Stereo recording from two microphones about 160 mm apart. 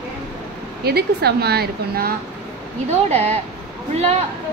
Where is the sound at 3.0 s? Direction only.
40° right (ahead or behind).